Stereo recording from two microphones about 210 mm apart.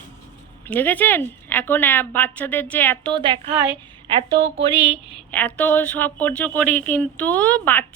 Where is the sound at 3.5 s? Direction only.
10° right (ahead or behind).